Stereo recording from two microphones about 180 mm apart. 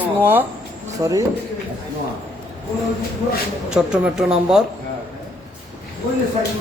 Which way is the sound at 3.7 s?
5° right (ahead or behind).